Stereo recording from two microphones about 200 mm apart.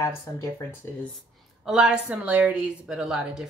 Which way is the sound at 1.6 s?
5° right (ahead or behind).